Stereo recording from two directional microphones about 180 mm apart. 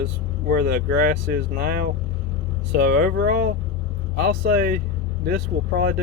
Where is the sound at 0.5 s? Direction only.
55° right (ahead or behind).